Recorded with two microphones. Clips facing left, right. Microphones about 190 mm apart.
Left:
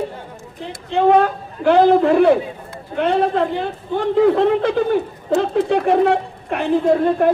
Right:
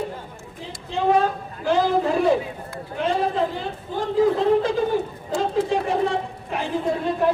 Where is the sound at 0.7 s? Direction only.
60° left (ahead or behind).